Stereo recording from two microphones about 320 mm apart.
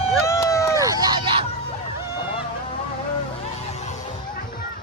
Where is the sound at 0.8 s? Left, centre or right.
Centre.